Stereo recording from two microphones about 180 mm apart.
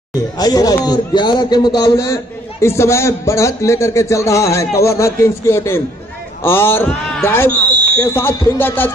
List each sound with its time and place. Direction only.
0.4 s a man's voice: 20° left (ahead or behind)